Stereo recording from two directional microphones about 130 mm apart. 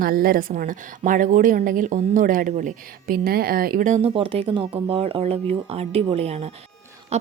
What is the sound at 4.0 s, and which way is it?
Speech, 45° right (ahead or behind).